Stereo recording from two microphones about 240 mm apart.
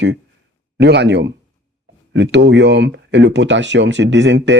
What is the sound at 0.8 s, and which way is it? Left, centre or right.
Speech, right.